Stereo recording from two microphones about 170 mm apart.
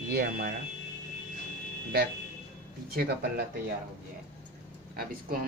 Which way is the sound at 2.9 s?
60° right (ahead or behind).